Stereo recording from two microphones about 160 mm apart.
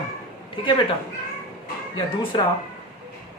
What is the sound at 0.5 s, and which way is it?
Speech, 30° left (ahead or behind).